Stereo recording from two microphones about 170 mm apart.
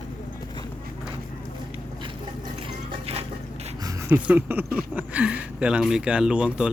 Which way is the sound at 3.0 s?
35° right (ahead or behind).